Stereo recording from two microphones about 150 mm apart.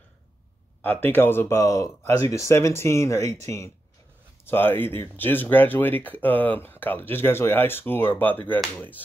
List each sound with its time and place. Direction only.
0.8 s speech: 15° left (ahead or behind)